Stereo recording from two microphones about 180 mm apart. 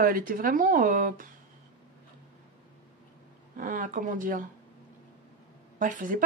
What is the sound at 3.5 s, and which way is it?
Speech, 50° right (ahead or behind).